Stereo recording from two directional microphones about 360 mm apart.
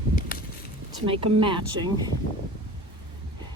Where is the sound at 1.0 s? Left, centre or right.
Centre.